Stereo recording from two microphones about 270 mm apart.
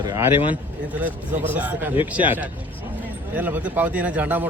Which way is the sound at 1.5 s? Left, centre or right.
Centre.